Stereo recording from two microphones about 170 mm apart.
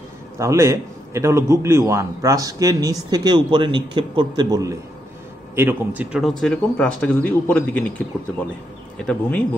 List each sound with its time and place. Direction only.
0.4 s a man's voice: 15° right (ahead or behind)
5.6 s speech: 10° right (ahead or behind); by 7.8 s 10° left (ahead or behind)
8.9 s speech: 5° left (ahead or behind)